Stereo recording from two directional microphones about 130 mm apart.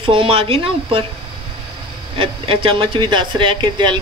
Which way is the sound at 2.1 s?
45° right (ahead or behind).